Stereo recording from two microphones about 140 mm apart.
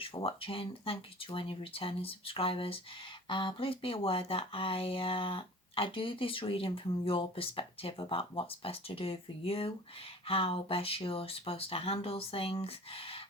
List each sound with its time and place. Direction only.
0.0 s speech: 40° left (ahead or behind)